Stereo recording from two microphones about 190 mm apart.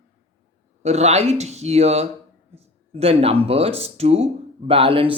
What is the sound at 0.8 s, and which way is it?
Speech, 35° right (ahead or behind).